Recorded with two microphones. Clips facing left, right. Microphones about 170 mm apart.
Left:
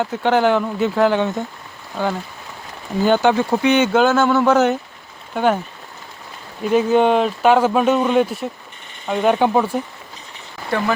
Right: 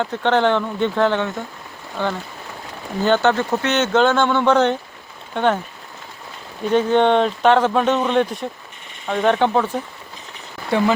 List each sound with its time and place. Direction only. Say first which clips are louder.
0.0 s speech: left 1 dB; 10° left (ahead or behind)
6.7 s speech: left 1 dB; 5° left (ahead or behind)